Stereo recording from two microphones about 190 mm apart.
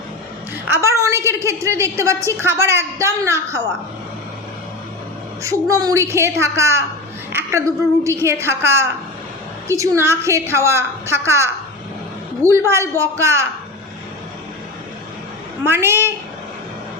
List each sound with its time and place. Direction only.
0.7 s a woman's voice: 15° right (ahead or behind)
5.4 s a woman's voice: 15° right (ahead or behind)
15.6 s a woman's voice: 10° right (ahead or behind)